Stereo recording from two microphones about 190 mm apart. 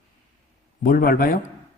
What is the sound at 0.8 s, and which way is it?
Speech, 50° left (ahead or behind).